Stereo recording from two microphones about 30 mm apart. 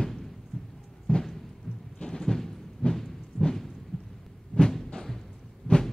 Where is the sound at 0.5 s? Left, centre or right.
Left.